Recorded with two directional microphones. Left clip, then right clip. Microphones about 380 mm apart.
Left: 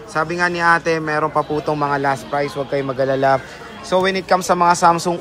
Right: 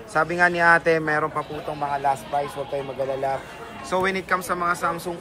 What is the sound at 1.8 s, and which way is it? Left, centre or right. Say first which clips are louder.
Speech: even; left.